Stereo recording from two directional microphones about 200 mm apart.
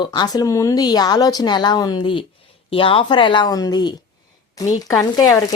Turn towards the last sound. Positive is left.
turn(degrees=20)  # may be behind; listen again after turning